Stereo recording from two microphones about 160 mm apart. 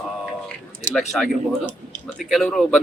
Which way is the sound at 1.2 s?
Centre (ahead or behind).